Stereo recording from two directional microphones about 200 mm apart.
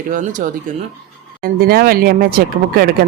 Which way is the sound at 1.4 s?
50° right (ahead or behind).